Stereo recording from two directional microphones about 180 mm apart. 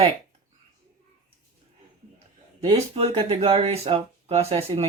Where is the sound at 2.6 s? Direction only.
35° right (ahead or behind).